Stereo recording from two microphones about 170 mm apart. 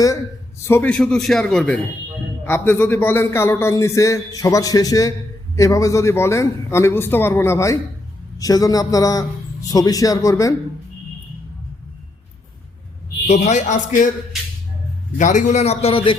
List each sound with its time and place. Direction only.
0.6 s a man's voice: 10° left (ahead or behind)
13.2 s a man's voice: 40° left (ahead or behind)
15.2 s a man's voice: 45° left (ahead or behind)